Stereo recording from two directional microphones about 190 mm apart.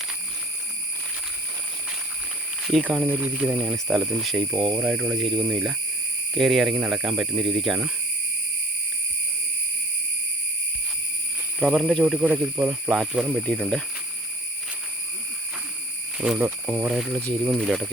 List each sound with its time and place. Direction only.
2.6 s speech: 5° right (ahead or behind)
4.5 s speech: 25° right (ahead or behind)
4.8 s speech: 5° right (ahead or behind)
11.6 s speech: centre (ahead or behind)
16.1 s speech: 5° right (ahead or behind)